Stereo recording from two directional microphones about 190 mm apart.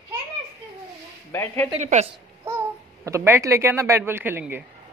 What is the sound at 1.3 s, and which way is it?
Speech, 15° left (ahead or behind).